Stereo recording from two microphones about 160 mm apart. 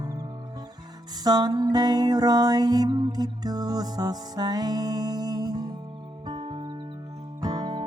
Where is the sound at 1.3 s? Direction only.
25° right (ahead or behind).